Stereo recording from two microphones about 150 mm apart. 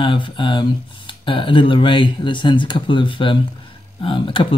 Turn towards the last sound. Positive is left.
turn(degrees=35)  # may be behind; listen again after turning